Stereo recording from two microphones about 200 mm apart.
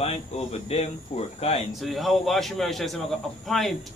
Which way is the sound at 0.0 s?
30° left (ahead or behind).